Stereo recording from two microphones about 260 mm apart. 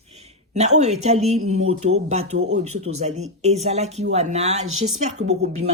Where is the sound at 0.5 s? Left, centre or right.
Right.